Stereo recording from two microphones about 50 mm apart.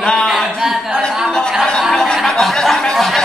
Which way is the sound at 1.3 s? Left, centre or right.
Centre.